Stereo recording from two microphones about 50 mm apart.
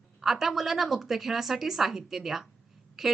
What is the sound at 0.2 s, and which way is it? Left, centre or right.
Speech, centre.